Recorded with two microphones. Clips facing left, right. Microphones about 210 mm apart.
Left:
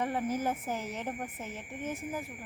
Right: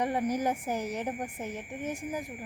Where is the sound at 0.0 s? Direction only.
15° right (ahead or behind).